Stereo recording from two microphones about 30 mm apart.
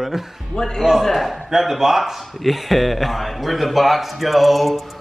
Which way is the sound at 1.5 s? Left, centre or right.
Centre.